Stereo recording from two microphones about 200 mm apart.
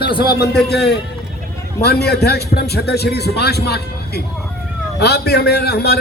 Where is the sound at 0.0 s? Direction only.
50° left (ahead or behind).